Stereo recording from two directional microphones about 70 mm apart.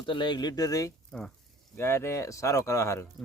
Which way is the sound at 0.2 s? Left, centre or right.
Left.